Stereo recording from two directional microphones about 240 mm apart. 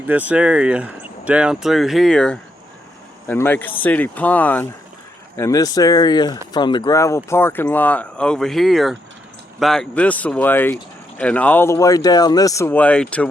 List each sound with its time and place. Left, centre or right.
0.1 s speech: centre